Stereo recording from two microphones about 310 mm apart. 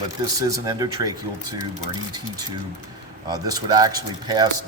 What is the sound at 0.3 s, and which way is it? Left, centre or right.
Speech, centre.